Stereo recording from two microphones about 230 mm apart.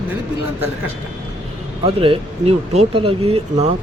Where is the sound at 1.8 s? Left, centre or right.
Right.